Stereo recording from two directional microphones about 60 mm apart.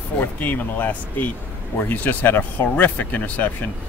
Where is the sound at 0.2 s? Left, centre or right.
Left.